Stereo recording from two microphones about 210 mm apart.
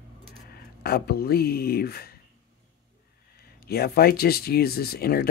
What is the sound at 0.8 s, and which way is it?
Speech, 50° left (ahead or behind).